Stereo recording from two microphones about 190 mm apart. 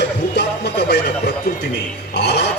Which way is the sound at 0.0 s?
60° left (ahead or behind).